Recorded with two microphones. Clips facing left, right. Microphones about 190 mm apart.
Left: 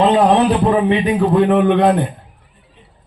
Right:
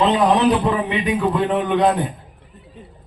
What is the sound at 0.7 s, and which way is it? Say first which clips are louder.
Speech: left 6 dB; 40° left (ahead or behind).